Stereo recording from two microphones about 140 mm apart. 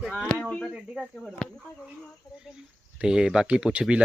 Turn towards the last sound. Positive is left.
turn(degrees=-5)  # may be behind; listen again after turning